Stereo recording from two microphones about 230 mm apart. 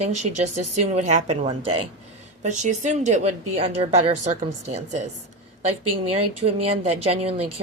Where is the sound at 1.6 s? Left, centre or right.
Right.